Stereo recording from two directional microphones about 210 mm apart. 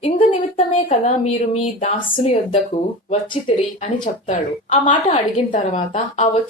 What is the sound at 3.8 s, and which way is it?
A woman's voice, 35° left (ahead or behind).